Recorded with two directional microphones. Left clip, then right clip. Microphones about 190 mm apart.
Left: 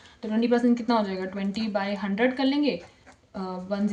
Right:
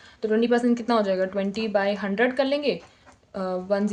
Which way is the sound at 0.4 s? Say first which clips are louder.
Left 3 dB; 40° right (ahead or behind).